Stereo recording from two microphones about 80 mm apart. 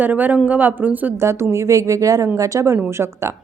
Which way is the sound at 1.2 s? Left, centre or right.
Right.